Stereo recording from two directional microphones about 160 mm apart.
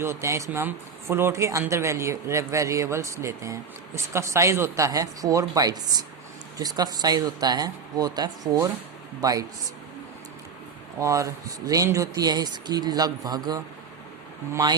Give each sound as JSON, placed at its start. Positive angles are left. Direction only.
{"t": 0.0, "sound": "a man's voice", "side_deg": -15}
{"t": 11.0, "sound": "speech", "side_deg": -20}